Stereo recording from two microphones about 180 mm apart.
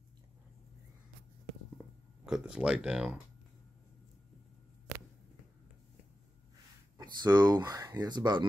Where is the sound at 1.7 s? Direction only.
5° right (ahead or behind).